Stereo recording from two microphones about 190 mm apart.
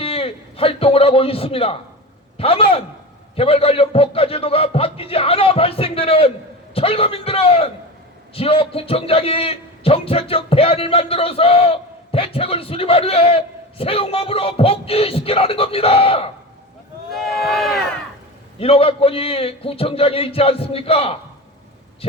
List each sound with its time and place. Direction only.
0.0 s a man's voice: 30° left (ahead or behind)
17.2 s speech: centre (ahead or behind)
18.6 s a man's voice: 30° left (ahead or behind)